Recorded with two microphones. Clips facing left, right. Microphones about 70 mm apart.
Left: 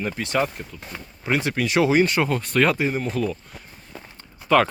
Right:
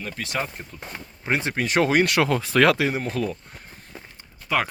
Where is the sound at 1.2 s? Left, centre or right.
Right.